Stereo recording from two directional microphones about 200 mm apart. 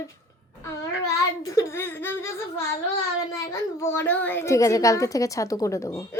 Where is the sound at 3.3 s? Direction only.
15° left (ahead or behind).